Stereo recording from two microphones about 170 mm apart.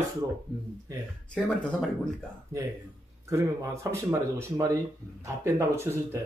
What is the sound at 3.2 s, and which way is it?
Speech, 15° right (ahead or behind).